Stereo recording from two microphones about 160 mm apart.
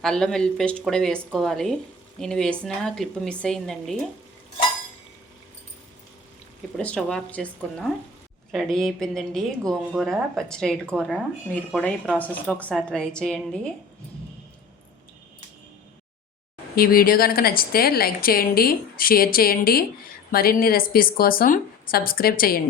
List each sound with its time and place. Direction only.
0.0 s a woman's voice: 5° left (ahead or behind)
6.7 s a woman's voice: 5° left (ahead or behind)
16.7 s a woman's voice: 65° left (ahead or behind)